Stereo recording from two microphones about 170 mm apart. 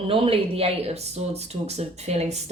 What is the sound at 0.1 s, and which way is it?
Speech, 35° right (ahead or behind).